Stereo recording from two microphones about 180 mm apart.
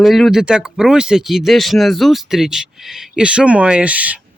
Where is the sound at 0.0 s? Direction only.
Centre (ahead or behind).